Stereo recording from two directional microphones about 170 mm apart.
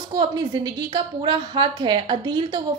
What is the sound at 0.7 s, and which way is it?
A woman's voice, 25° right (ahead or behind).